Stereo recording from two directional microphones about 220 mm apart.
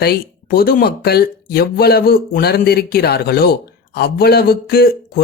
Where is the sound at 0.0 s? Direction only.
45° left (ahead or behind).